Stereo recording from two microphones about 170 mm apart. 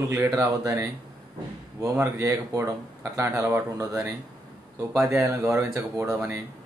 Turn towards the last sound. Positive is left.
turn(degrees=-15)  # may be behind; listen again after turning